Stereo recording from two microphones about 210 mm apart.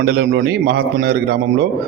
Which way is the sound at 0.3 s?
50° right (ahead or behind).